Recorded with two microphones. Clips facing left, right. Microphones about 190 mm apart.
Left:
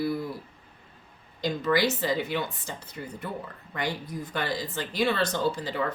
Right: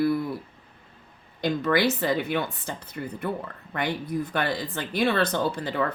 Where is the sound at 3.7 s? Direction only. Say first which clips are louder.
Right 4 dB; 60° right (ahead or behind).